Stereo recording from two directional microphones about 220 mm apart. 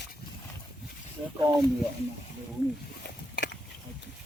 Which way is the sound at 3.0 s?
50° left (ahead or behind).